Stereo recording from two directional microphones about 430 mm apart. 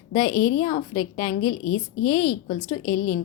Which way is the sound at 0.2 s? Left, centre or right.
Left.